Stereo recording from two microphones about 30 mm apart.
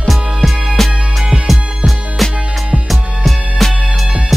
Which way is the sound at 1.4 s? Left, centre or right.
Centre.